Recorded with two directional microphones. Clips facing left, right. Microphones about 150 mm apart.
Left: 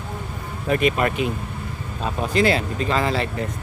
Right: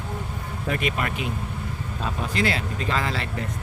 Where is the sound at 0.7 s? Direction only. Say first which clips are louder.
Left 8 dB; 30° left (ahead or behind).